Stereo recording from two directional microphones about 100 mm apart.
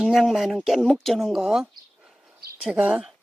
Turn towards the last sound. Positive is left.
turn(degrees=-15)  # may be behind; listen again after turning